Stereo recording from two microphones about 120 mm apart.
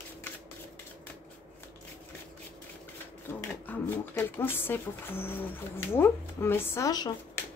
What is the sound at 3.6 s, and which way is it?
Speech, 15° left (ahead or behind).